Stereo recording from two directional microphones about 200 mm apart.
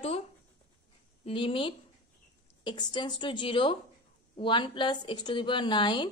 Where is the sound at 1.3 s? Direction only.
25° left (ahead or behind).